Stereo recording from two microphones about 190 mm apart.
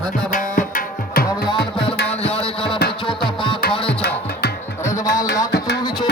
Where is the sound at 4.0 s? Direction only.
55° left (ahead or behind).